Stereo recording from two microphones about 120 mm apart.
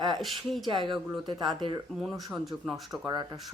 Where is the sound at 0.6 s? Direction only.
40° right (ahead or behind).